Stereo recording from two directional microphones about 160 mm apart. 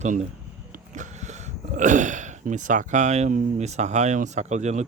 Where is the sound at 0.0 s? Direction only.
45° right (ahead or behind).